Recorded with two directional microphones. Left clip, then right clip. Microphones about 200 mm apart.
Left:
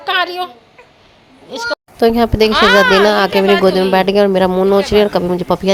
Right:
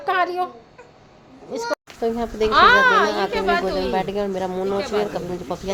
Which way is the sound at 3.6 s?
55° left (ahead or behind).